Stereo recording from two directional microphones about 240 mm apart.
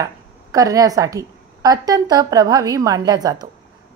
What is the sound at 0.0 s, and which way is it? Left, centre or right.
A woman's voice, centre.